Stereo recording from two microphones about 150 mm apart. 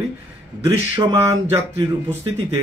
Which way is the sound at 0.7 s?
25° right (ahead or behind).